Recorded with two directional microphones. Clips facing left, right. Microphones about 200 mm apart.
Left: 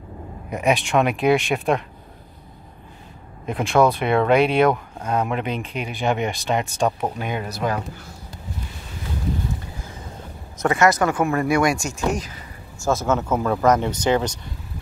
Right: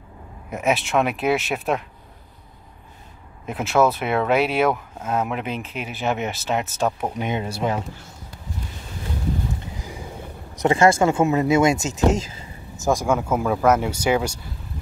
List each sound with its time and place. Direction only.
0.5 s speech: centre (ahead or behind)
3.4 s speech: 5° right (ahead or behind)
7.2 s speech: 25° right (ahead or behind)
9.8 s a sound: 15° right (ahead or behind)
10.7 s speech: 25° right (ahead or behind); by 14.4 s 10° right (ahead or behind)